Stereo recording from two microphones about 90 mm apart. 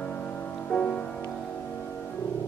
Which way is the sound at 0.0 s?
10° left (ahead or behind).